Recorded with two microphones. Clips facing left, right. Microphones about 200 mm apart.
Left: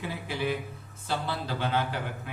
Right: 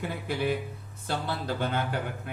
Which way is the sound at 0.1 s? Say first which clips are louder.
Right 2 dB; 50° right (ahead or behind).